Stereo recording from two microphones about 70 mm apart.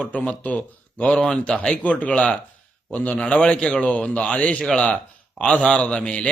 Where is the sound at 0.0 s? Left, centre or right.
Centre.